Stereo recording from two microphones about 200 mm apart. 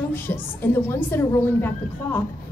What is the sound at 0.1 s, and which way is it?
A woman's voice, 10° left (ahead or behind).